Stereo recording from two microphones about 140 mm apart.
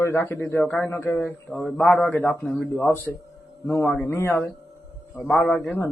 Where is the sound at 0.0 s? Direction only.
20° left (ahead or behind).